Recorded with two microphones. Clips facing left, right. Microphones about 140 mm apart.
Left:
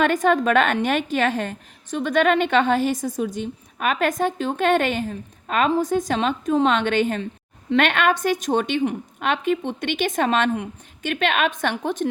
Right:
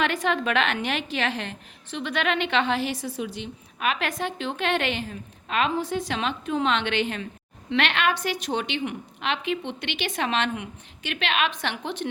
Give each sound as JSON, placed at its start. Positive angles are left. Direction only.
{"t": 0.0, "sound": "a woman's voice", "side_deg": 45}